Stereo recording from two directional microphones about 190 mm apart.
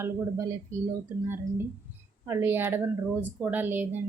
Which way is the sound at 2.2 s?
10° right (ahead or behind).